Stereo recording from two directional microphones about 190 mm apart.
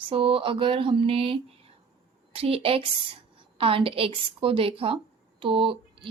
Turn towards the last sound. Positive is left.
turn(degrees=-25)  # may be behind; listen again after turning